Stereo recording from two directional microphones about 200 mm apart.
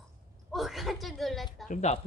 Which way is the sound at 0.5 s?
Centre (ahead or behind).